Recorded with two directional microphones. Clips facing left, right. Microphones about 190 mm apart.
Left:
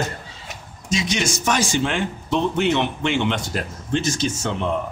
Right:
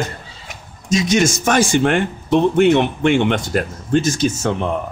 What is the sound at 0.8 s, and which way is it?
Speech, 45° right (ahead or behind).